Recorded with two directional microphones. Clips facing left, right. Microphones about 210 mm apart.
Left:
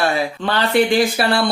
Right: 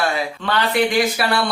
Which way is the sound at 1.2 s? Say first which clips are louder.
Left 3 dB; 30° left (ahead or behind).